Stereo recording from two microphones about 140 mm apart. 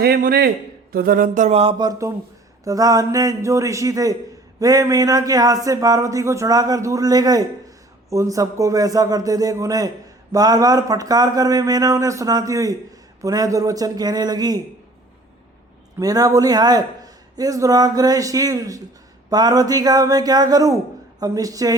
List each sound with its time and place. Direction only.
0.0 s a man's voice: 90° right
0.9 s a sound: 90° right; by 1.7 s 50° right (ahead or behind)
1.8 s a man's voice: 25° right (ahead or behind)
16.0 s a man's voice: 25° right (ahead or behind)